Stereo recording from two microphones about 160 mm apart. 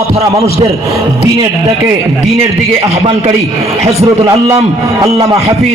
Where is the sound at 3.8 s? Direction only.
20° right (ahead or behind).